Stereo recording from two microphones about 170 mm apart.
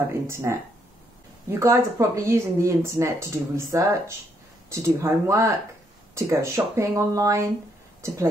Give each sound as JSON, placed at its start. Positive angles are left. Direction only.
{"t": 0.1, "sound": "speech", "side_deg": -15}